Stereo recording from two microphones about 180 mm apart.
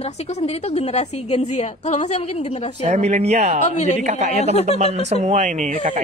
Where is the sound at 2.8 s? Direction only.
35° right (ahead or behind).